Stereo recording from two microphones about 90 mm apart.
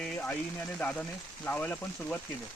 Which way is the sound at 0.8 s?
15° left (ahead or behind).